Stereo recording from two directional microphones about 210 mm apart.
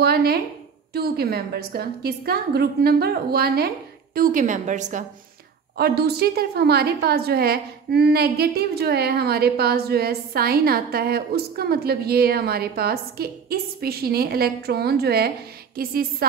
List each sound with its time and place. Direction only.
0.0 s a sound: 45° right (ahead or behind)
0.9 s a woman's voice: 50° right (ahead or behind)
5.8 s a woman's voice: 50° right (ahead or behind)